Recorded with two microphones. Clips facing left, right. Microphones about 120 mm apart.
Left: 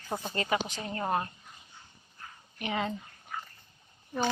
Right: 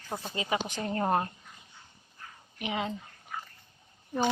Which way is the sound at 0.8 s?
40° right (ahead or behind).